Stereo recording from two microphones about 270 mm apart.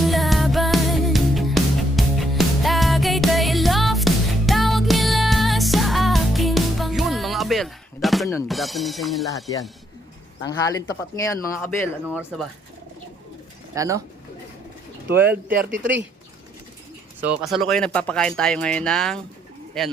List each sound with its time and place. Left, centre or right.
0.0 s music: centre
8.4 s speech: centre
10.4 s speech: centre
12.0 s speech: centre
13.7 s speech: centre
15.2 s speech: centre
15.7 s speech: right
17.2 s speech: centre